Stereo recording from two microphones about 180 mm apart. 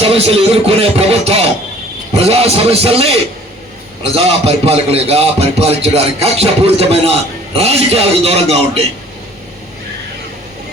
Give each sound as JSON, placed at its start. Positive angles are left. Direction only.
{"t": 0.0, "sound": "a man's voice", "side_deg": -35}